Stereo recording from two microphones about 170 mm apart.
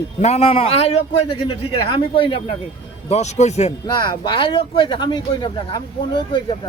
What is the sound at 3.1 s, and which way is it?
Speech, 40° left (ahead or behind).